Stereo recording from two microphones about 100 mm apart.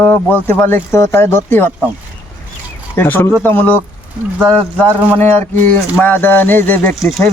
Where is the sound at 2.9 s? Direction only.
20° left (ahead or behind).